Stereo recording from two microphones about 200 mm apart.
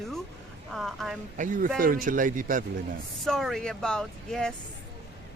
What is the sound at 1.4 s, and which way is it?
A man's voice, 40° right (ahead or behind).